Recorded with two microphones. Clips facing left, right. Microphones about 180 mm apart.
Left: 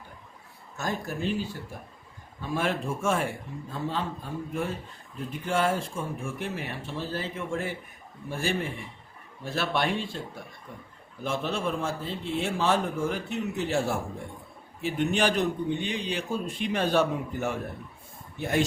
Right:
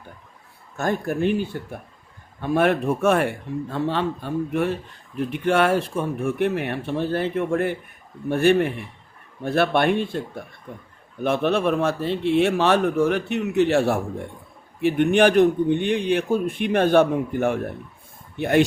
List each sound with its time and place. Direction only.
0.8 s a man's voice: 60° right (ahead or behind)
18.3 s a man's voice: 65° right (ahead or behind)